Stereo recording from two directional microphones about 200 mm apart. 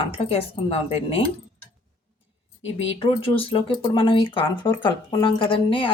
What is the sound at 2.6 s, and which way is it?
Speech, 75° left (ahead or behind).